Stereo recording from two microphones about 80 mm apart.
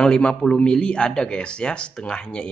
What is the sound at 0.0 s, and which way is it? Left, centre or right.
A man's voice, centre.